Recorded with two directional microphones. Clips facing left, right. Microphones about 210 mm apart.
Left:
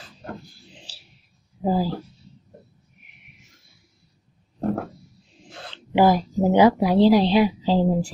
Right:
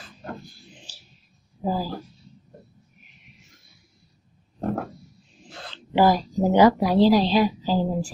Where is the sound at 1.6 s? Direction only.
25° left (ahead or behind).